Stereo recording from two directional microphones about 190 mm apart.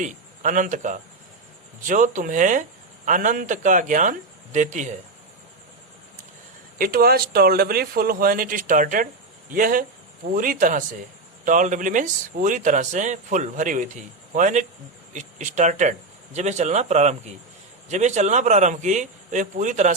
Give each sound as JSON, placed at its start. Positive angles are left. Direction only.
{"t": 0.0, "sound": "speech", "side_deg": -40}
{"t": 6.7, "sound": "speech", "side_deg": -50}